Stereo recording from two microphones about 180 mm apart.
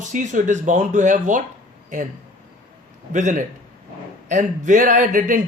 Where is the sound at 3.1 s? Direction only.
45° right (ahead or behind).